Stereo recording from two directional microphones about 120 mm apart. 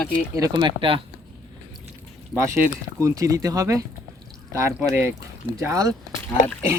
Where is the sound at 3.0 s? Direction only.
30° right (ahead or behind).